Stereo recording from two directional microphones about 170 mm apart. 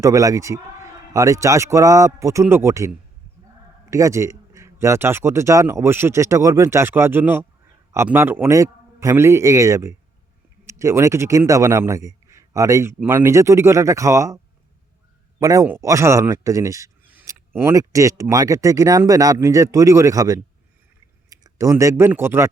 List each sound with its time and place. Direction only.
0.0 s a man's voice: 20° right (ahead or behind)
15.4 s a man's voice: 20° right (ahead or behind)